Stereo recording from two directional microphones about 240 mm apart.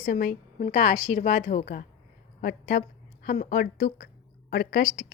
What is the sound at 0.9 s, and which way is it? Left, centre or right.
Speech, centre.